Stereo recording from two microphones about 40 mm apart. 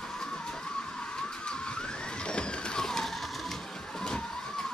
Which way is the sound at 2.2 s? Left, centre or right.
Left.